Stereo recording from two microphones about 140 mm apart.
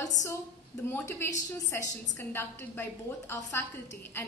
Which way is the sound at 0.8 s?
15° left (ahead or behind).